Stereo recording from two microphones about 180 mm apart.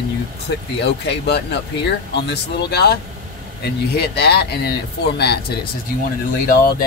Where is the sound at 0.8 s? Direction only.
70° left (ahead or behind).